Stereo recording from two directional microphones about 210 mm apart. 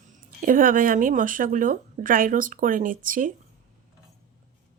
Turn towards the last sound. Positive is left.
turn(degrees=-40)  # may be behind; listen again after turning